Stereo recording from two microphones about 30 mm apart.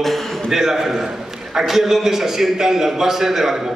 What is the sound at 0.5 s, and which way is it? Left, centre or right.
A man's voice, centre.